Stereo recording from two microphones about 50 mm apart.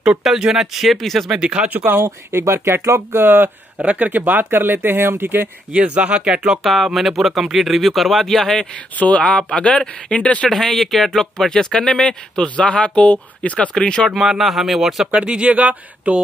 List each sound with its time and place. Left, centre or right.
0.2 s speech: centre
1.4 s speech: centre
1.7 s speech: right
2.0 s speech: right
3.7 s speech: right
4.2 s speech: right
5.7 s speech: right
6.6 s speech: centre
9.0 s speech: left
9.4 s speech: centre
10.5 s speech: centre; by 13.7 s left
13.7 s speech: centre
14.1 s speech: centre
15.0 s speech: right